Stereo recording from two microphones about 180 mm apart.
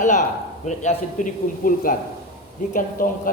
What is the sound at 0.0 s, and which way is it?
A man's voice, 45° left (ahead or behind).